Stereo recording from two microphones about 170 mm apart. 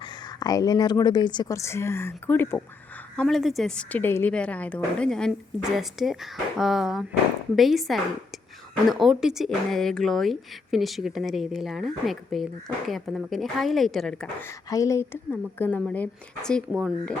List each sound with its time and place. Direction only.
0.0 s speech: 25° left (ahead or behind)
3.2 s speech: centre (ahead or behind)
14.4 s speech: 20° left (ahead or behind); by 17.2 s centre (ahead or behind)